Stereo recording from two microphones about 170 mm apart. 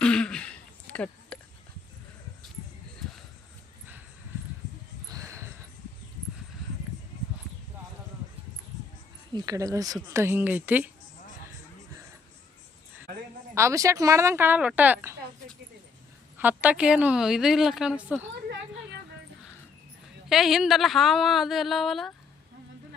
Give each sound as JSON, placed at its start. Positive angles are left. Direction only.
{"t": 0.0, "sound": "throat clearing", "side_deg": 5}
{"t": 5.0, "sound": "a sound", "side_deg": -20}
{"t": 9.3, "sound": "speech", "side_deg": -25}
{"t": 13.5, "sound": "speech", "side_deg": -15}
{"t": 16.4, "sound": "a woman's voice", "side_deg": -10}
{"t": 20.3, "sound": "a woman's voice", "side_deg": 0}